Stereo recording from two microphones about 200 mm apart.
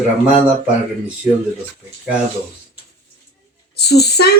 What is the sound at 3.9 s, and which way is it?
Child singing, 55° left (ahead or behind).